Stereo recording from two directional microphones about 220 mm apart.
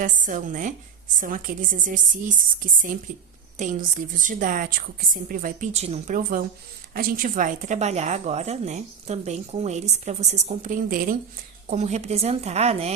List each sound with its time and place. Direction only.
0.0 s speech: 35° right (ahead or behind)